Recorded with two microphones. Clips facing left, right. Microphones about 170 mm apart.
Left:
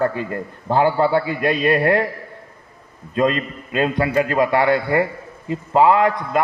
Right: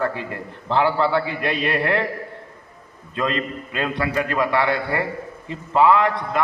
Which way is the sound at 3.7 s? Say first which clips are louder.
Left 6 dB; 20° left (ahead or behind).